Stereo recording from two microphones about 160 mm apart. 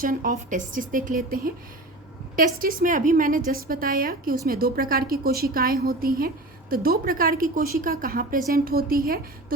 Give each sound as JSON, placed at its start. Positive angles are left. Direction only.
{"t": 0.0, "sound": "a woman's voice", "side_deg": -60}